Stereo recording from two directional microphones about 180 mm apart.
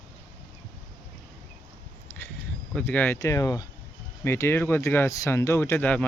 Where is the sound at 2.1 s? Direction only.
10° left (ahead or behind).